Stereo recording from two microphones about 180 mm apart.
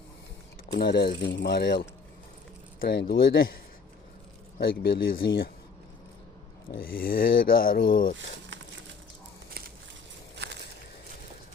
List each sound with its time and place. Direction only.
0.8 s speech: 65° left (ahead or behind)
4.6 s speech: 60° left (ahead or behind)
6.7 s speech: 55° left (ahead or behind)
10.3 s a sound: 70° right (ahead or behind)